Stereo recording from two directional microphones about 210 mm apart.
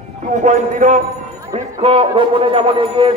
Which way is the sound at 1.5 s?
25° right (ahead or behind).